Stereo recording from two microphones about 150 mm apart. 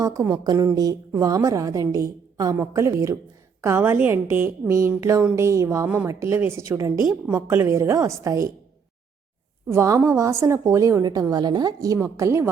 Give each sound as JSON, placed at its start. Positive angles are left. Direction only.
{"t": 0.0, "sound": "a woman's voice", "side_deg": -20}
{"t": 9.6, "sound": "a woman's voice", "side_deg": -20}